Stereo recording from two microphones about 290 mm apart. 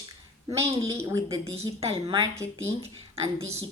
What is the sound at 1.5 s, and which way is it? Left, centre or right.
Speech, right.